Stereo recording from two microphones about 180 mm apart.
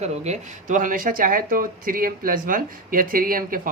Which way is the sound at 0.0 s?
40° right (ahead or behind).